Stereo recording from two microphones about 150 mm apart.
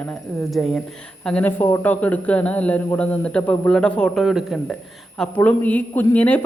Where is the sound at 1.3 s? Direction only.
10° left (ahead or behind).